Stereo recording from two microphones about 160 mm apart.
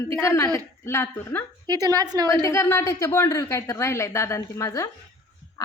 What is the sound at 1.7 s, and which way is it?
Speech, 25° right (ahead or behind).